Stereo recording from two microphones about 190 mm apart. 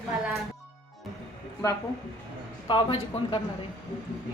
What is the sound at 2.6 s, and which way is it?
Speech, 25° left (ahead or behind).